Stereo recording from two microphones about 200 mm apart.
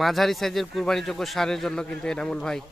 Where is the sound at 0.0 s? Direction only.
Centre (ahead or behind).